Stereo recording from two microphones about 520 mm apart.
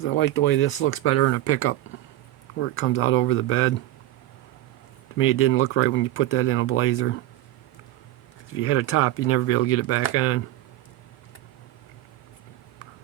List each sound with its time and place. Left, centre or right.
0.0 s speech: left
5.1 s speech: left
8.5 s speech: left